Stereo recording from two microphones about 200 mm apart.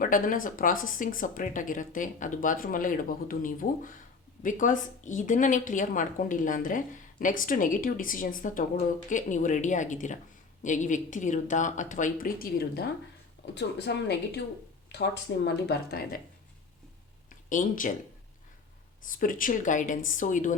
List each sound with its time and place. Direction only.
0.0 s a woman's voice: 45° left (ahead or behind)
17.5 s a woman's voice: 40° left (ahead or behind)
19.0 s a woman's voice: 40° left (ahead or behind)